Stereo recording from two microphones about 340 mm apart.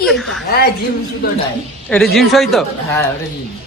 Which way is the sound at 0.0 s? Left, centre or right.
Centre.